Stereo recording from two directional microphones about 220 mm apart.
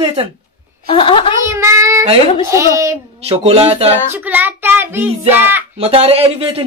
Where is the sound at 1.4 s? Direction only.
15° right (ahead or behind).